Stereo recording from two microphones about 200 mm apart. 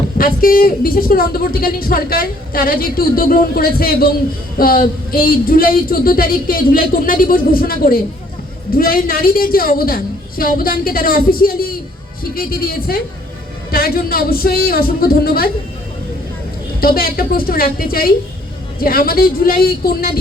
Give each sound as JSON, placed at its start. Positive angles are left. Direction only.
{"t": 0.2, "sound": "a woman's voice", "side_deg": 45}
{"t": 16.8, "sound": "a woman's voice", "side_deg": 50}